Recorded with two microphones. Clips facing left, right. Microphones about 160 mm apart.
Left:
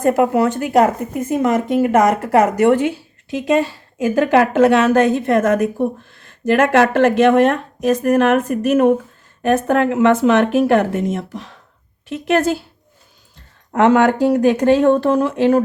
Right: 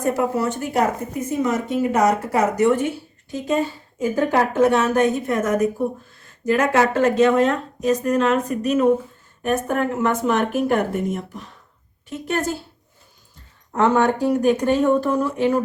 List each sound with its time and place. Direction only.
0.1 s speech: 70° left (ahead or behind); by 5.5 s 90° left
6.0 s speech: 75° left (ahead or behind)
9.4 s speech: 90° left
13.7 s speech: 85° left